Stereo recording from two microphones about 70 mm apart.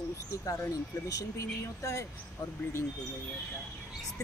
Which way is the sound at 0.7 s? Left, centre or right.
Left.